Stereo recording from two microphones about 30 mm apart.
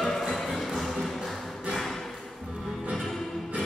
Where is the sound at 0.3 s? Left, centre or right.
Centre.